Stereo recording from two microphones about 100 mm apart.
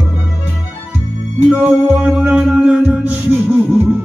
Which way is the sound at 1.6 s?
15° right (ahead or behind).